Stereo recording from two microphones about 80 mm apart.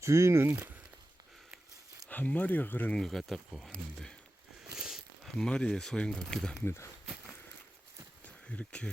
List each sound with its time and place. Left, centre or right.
0.0 s speech: right
0.5 s speech: right
2.0 s speech: left
2.9 s speech: centre
4.6 s a sound: centre
5.4 s speech: centre
8.2 s a sound: centre